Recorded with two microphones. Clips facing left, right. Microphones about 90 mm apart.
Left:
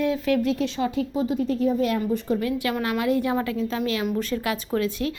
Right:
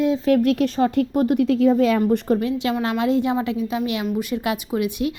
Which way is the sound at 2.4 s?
25° right (ahead or behind).